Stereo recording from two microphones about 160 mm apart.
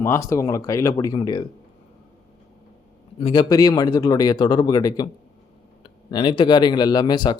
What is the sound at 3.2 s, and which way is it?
Speech, 35° left (ahead or behind).